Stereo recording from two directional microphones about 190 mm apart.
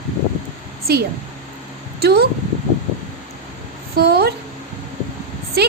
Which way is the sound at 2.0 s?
55° right (ahead or behind).